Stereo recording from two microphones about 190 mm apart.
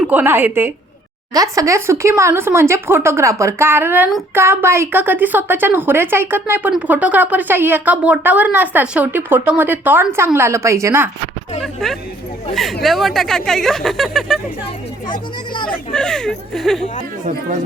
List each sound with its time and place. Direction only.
0.0 s speech: 10° right (ahead or behind)
11.6 s music: centre (ahead or behind)
12.8 s speech: centre (ahead or behind)
15.0 s speech: 25° left (ahead or behind)
15.9 s speech: 5° left (ahead or behind)